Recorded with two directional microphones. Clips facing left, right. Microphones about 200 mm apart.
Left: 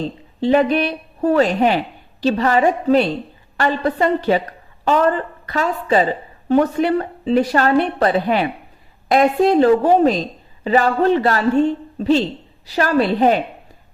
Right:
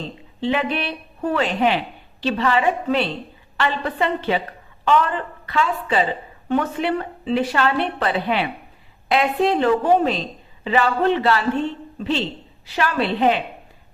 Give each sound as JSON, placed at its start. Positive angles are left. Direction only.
{"t": 0.3, "sound": "a woman's voice", "side_deg": 40}